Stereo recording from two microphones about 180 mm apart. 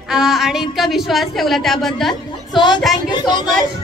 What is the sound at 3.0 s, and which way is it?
Speech, 25° left (ahead or behind).